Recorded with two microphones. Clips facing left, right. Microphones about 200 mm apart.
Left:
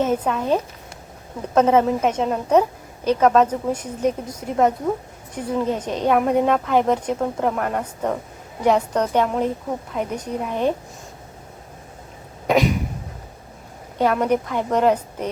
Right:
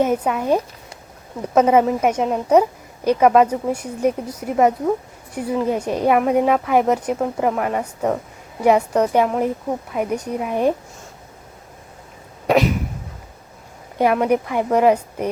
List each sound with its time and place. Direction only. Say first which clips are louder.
0.0 s speech: right 2 dB; 10° right (ahead or behind)
12.5 s cough: right 2 dB; centre (ahead or behind)
14.0 s speech: right 2 dB; 10° right (ahead or behind)